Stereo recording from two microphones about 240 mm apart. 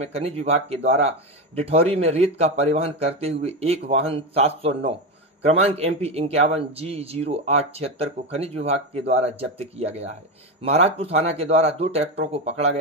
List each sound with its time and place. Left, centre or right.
0.0 s a man's voice: right